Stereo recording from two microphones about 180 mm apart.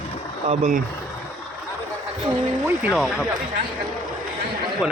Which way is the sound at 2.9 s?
Centre (ahead or behind).